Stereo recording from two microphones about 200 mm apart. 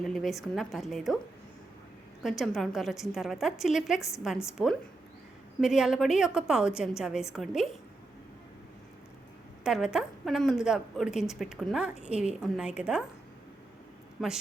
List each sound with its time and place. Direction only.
0.0 s a woman's voice: centre (ahead or behind)
2.2 s a woman's voice: centre (ahead or behind)
9.6 s a woman's voice: 5° right (ahead or behind)
14.2 s a woman's voice: centre (ahead or behind)